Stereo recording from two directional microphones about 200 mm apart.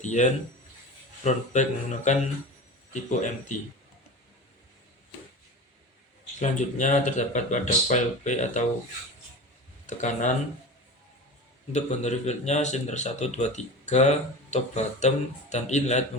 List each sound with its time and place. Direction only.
0.0 s speech: 35° left (ahead or behind)
6.4 s speech: 35° left (ahead or behind)
9.8 s speech: 40° left (ahead or behind)
11.7 s speech: 35° left (ahead or behind)